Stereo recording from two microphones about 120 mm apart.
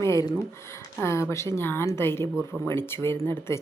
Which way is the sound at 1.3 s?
25° left (ahead or behind).